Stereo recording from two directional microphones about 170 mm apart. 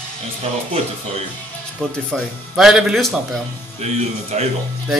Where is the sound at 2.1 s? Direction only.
Centre (ahead or behind).